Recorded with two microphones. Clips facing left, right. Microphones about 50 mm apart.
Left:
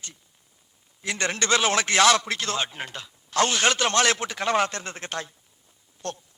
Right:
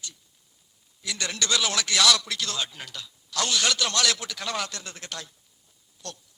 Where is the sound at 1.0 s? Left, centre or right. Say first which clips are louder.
Left 4 dB; left.